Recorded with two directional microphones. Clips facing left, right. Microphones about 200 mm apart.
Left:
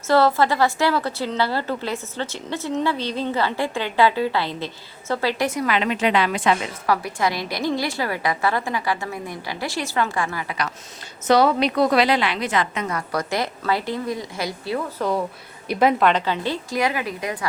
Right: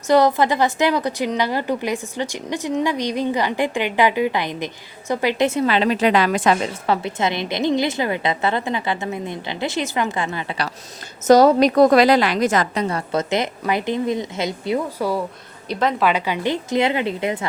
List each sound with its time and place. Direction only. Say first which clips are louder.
0.1 s a woman's voice: right 2 dB; 15° right (ahead or behind); by 6.7 s 40° right (ahead or behind)
6.8 s a woman's voice: left 1 dB; 25° right (ahead or behind)
11.3 s a woman's voice: right 5 dB; 45° right (ahead or behind); by 15.0 s 20° right (ahead or behind)
15.7 s a woman's voice: left 3 dB; 10° left (ahead or behind)
16.0 s a woman's voice: even; 5° right (ahead or behind); by 17.4 s 25° right (ahead or behind)